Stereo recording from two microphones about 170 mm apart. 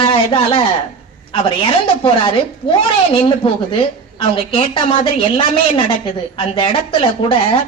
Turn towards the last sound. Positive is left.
turn(degrees=30)  # may be behind; listen again after turning